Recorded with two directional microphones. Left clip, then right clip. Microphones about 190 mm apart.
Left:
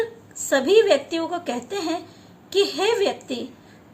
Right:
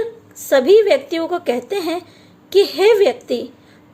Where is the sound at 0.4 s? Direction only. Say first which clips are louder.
Right 5 dB; 35° right (ahead or behind).